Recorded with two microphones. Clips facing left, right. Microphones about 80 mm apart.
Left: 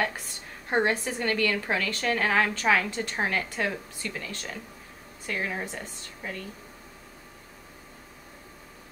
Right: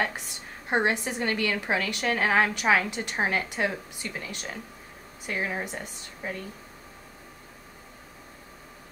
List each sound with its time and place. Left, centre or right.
0.7 s a woman's voice: centre